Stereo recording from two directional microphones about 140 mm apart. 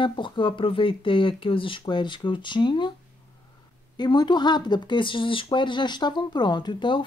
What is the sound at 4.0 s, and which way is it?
Speech, 30° left (ahead or behind).